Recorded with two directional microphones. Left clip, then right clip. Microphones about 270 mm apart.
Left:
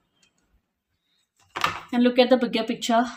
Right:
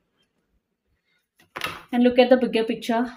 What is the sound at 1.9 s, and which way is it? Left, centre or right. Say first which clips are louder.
Speech: right 3 dB; centre.